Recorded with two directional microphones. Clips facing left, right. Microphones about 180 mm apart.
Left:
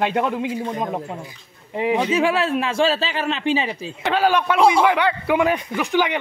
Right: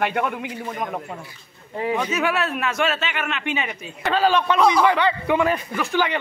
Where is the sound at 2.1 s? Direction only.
30° left (ahead or behind).